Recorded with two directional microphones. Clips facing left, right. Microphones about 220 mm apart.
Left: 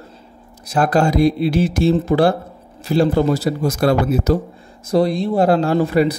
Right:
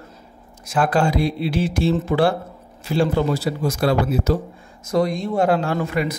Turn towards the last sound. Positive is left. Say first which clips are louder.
# left 7 dB
turn(degrees=35)  # may be behind; listen again after turning